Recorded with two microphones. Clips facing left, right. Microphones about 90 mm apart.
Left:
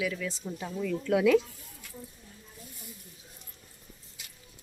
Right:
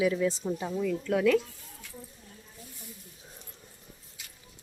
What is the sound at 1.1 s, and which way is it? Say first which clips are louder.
Speech: left 2 dB; 5° left (ahead or behind).